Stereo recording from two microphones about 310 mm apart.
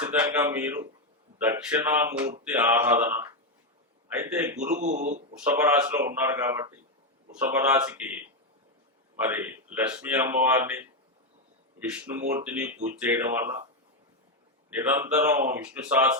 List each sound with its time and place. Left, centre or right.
0.1 s speech: centre
4.7 s speech: right
5.5 s speech: centre
9.3 s speech: centre
14.7 s speech: centre